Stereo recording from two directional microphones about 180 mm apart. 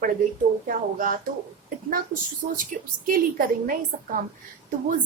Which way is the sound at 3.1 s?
50° right (ahead or behind).